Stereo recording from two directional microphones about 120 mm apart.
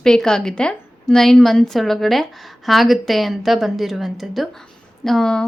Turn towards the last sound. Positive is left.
turn(degrees=5)  # may be behind; listen again after turning